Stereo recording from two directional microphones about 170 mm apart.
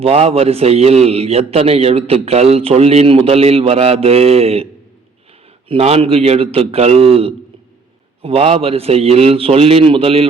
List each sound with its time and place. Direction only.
0.0 s a man's voice: 35° right (ahead or behind)